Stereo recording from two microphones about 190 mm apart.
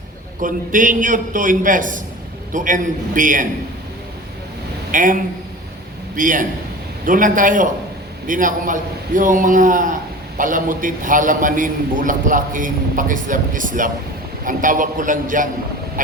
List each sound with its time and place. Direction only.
0.4 s a man's voice: 45° right (ahead or behind)
4.9 s a man's voice: 45° right (ahead or behind)